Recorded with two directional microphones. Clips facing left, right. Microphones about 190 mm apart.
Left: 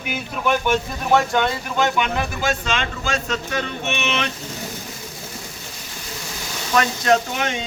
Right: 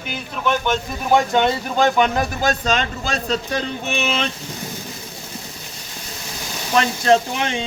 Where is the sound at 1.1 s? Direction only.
20° right (ahead or behind).